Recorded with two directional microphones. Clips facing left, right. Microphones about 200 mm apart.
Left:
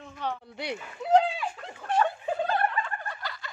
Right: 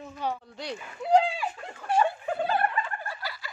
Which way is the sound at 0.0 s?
10° right (ahead or behind).